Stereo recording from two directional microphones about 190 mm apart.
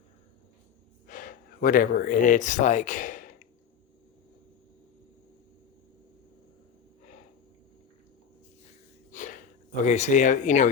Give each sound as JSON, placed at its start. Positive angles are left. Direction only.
{"t": 1.0, "sound": "speech", "side_deg": 45}
{"t": 9.1, "sound": "a sound", "side_deg": 45}
{"t": 9.8, "sound": "speech", "side_deg": 40}